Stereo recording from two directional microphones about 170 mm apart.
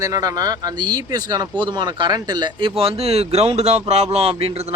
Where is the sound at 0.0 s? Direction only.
20° right (ahead or behind).